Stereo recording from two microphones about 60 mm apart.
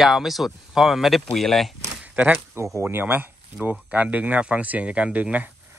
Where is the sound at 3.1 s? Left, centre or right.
Right.